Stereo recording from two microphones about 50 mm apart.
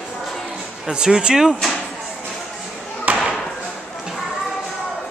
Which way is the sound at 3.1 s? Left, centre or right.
Right.